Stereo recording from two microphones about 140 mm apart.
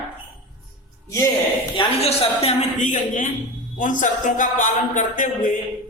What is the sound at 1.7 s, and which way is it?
A woman's voice, 45° left (ahead or behind).